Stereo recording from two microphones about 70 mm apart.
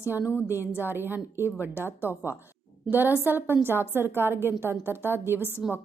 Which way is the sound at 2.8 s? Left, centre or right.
Right.